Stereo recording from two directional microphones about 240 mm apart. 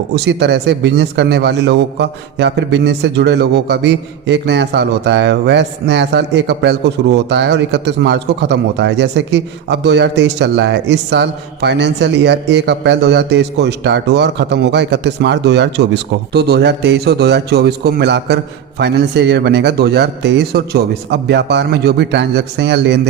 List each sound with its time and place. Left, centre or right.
0.1 s a man's voice: right